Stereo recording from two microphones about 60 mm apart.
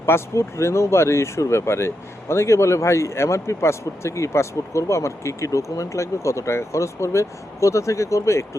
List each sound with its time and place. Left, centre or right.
0.0 s speech: left